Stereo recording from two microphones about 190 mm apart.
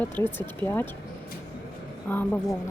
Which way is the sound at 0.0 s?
10° left (ahead or behind).